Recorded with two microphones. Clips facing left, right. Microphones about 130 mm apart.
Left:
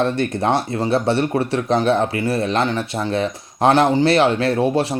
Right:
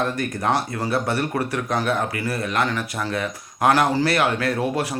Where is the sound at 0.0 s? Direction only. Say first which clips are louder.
Left 5 dB; 30° left (ahead or behind).